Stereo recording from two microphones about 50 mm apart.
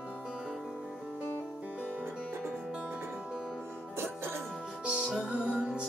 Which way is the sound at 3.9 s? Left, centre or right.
Right.